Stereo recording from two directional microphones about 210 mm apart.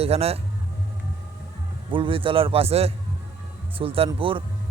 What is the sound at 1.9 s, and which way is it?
Speech, 25° right (ahead or behind).